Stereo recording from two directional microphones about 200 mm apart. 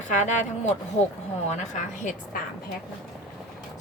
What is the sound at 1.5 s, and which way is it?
Speech, 35° left (ahead or behind).